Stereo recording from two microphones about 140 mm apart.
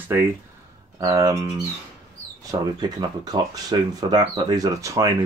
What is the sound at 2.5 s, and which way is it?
Speech, 30° right (ahead or behind).